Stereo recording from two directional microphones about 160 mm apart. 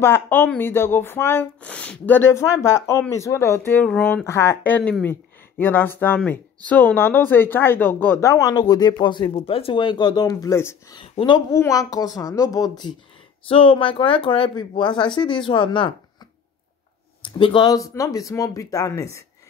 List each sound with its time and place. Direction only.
0.0 s speech: 15° left (ahead or behind)
11.0 s speech: 30° left (ahead or behind)
17.2 s speech: 30° left (ahead or behind)